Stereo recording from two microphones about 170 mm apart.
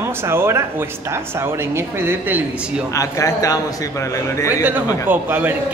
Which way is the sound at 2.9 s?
20° left (ahead or behind).